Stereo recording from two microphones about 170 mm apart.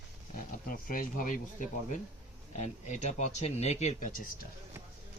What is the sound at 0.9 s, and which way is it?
Speech, 50° left (ahead or behind).